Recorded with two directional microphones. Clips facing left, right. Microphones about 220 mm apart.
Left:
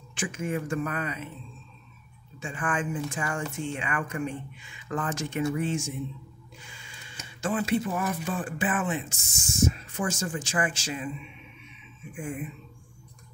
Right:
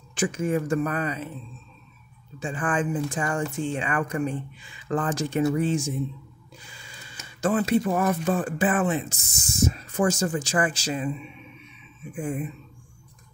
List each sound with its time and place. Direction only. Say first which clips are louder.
0.1 s speech: right 6 dB; 40° right (ahead or behind)
2.4 s speech: right 4 dB; 35° right (ahead or behind)
12.1 s speech: right 5 dB; 35° right (ahead or behind)